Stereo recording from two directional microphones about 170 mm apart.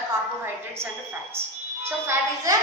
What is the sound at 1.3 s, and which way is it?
A woman's voice, 15° right (ahead or behind).